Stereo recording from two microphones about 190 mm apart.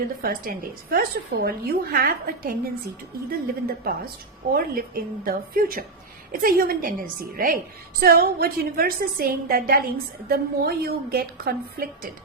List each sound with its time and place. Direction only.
0.2 s a woman's voice: 50° right (ahead or behind)